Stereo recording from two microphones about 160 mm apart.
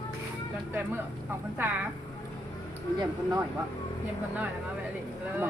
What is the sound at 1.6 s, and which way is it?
Speech, 15° right (ahead or behind).